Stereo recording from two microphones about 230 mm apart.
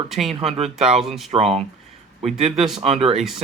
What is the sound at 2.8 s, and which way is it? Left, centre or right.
Speech, right.